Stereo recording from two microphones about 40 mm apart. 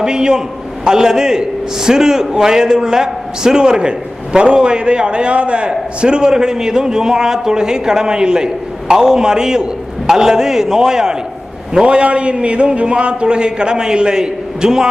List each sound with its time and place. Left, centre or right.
0.0 s a man's voice: centre